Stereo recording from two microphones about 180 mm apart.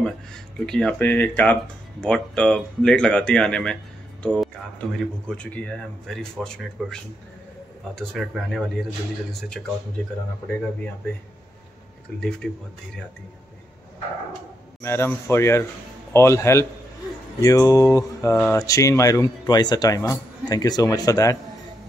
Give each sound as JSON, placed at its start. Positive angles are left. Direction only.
{"t": 0.0, "sound": "speech", "side_deg": 5}
{"t": 12.2, "sound": "speech", "side_deg": 5}
{"t": 14.8, "sound": "mantra", "side_deg": 15}
{"t": 18.5, "sound": "speech", "side_deg": 15}